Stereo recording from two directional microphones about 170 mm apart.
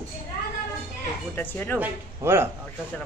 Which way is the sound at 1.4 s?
10° left (ahead or behind).